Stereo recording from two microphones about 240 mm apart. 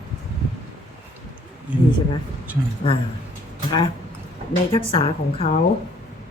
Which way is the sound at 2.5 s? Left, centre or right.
Centre.